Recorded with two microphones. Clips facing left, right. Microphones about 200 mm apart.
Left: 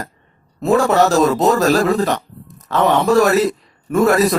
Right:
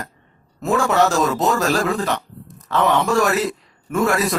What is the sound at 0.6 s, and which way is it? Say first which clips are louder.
Speech: left 4 dB; 35° left (ahead or behind).